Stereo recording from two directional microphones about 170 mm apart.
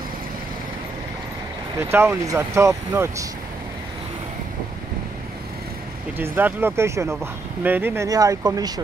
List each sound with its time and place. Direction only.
1.8 s speech: 15° right (ahead or behind)
6.1 s speech: 10° right (ahead or behind)